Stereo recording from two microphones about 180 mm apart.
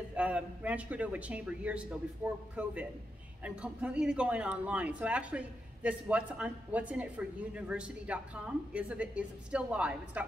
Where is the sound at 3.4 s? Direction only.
5° right (ahead or behind).